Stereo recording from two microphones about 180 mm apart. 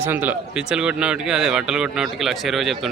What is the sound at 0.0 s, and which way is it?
Speech, 10° right (ahead or behind).